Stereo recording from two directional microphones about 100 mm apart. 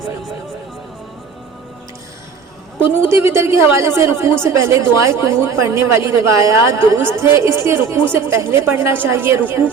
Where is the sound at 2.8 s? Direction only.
25° right (ahead or behind).